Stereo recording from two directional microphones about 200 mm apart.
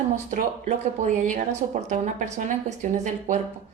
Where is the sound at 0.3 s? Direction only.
35° right (ahead or behind).